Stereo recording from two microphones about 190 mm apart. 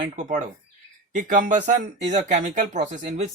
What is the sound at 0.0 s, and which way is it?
Speech, 40° right (ahead or behind).